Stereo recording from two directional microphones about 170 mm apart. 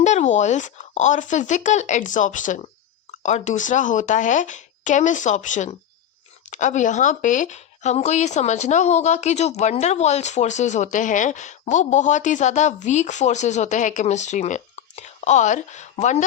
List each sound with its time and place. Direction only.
0.0 s speech: 45° left (ahead or behind)